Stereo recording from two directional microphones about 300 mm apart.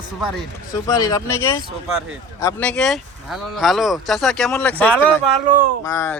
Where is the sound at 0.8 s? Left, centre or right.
Centre.